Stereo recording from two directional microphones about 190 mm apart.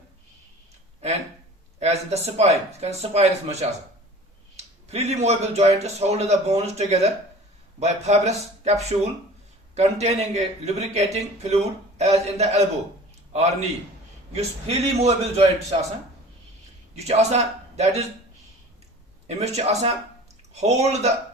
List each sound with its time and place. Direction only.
1.8 s a man's voice: 35° right (ahead or behind)
16.9 s a man's voice: 35° right (ahead or behind)
19.4 s a man's voice: 35° right (ahead or behind)